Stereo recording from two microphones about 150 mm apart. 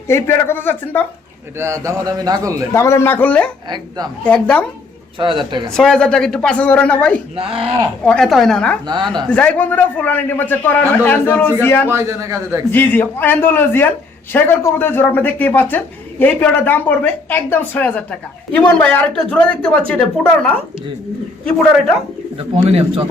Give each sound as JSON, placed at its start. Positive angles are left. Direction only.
{"t": 0.1, "sound": "speech", "side_deg": 15}
{"t": 1.5, "sound": "a man's voice", "side_deg": -20}
{"t": 2.7, "sound": "speech", "side_deg": 20}
{"t": 3.7, "sound": "a man's voice", "side_deg": -25}
{"t": 4.2, "sound": "speech", "side_deg": 5}
{"t": 5.2, "sound": "speech", "side_deg": -30}
{"t": 5.7, "sound": "speech", "side_deg": 5}
{"t": 7.3, "sound": "speech", "side_deg": -40}
{"t": 8.0, "sound": "speech", "side_deg": 5}
{"t": 11.9, "sound": "a man's voice", "side_deg": -20}
{"t": 12.7, "sound": "speech", "side_deg": 15}
{"t": 22.4, "sound": "speech", "side_deg": -40}